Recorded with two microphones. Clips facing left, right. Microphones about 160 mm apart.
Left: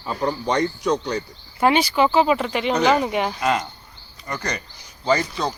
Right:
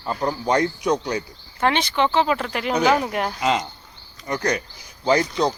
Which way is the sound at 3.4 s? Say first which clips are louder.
Even; 20° right (ahead or behind).